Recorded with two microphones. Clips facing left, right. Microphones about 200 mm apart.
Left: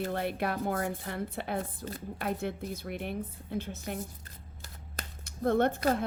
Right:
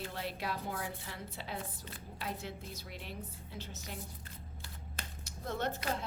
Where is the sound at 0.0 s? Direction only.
55° left (ahead or behind).